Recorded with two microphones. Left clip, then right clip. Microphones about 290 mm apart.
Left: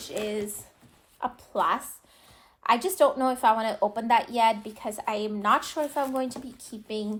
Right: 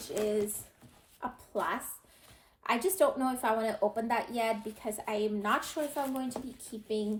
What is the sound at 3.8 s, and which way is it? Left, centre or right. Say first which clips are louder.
Speech: left 4 dB; centre.